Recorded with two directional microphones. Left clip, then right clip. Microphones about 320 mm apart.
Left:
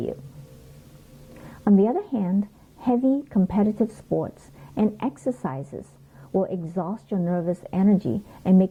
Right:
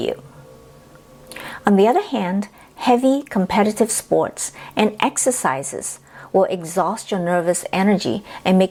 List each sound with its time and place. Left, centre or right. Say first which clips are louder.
1.3 s a woman's voice: right 5 dB; centre